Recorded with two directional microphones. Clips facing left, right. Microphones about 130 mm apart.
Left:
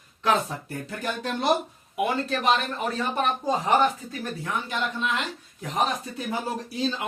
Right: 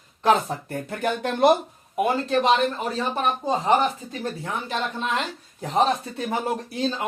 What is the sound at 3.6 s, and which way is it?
Speech, 25° right (ahead or behind).